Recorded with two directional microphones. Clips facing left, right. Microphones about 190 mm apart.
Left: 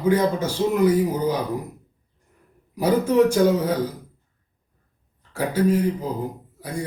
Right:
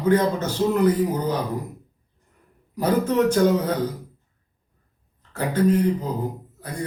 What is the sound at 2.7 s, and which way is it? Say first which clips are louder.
Speech: left 2 dB; 10° left (ahead or behind).